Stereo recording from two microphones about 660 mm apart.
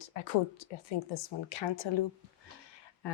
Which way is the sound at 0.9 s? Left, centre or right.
Left.